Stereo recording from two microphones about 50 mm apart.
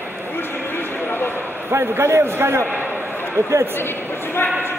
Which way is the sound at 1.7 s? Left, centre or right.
Right.